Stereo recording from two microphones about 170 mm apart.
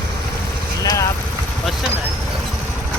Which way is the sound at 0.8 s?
20° left (ahead or behind).